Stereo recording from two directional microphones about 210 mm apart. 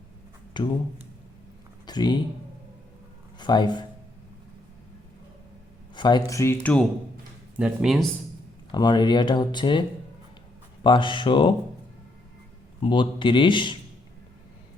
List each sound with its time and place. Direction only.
0.5 s speech: 20° left (ahead or behind)
1.9 s speech: 20° left (ahead or behind)
3.3 s speech: 20° left (ahead or behind)
5.9 s speech: 20° left (ahead or behind)
7.5 s speech: 5° right (ahead or behind)
8.7 s speech: 20° left (ahead or behind)
10.8 s speech: 25° left (ahead or behind)
12.8 s speech: 25° left (ahead or behind)